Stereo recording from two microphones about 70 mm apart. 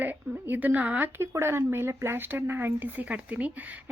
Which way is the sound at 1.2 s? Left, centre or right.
Right.